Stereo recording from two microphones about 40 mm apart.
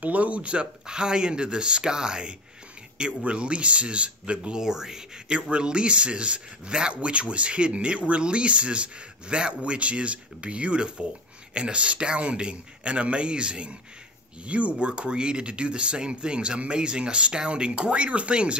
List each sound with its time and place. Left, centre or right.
0.0 s speech: right